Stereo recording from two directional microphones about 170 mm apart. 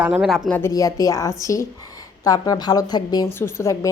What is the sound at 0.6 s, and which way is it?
A woman's voice, 20° left (ahead or behind).